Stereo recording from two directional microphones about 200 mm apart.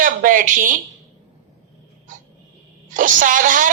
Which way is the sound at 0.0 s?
40° right (ahead or behind).